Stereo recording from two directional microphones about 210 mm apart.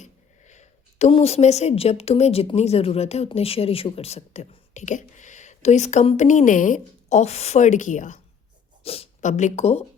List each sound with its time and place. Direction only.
0.0 s a woman's voice: 35° left (ahead or behind)